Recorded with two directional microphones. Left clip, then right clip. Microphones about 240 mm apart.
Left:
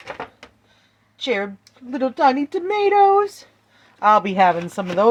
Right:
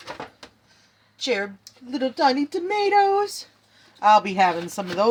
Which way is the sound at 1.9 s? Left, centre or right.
Left.